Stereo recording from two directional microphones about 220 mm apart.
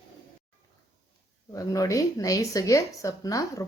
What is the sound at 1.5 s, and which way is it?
Speech, 15° left (ahead or behind).